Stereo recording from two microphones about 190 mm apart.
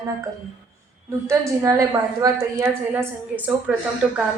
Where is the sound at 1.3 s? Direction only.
15° right (ahead or behind).